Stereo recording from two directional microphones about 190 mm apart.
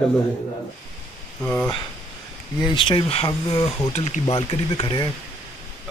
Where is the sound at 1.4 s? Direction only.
5° left (ahead or behind).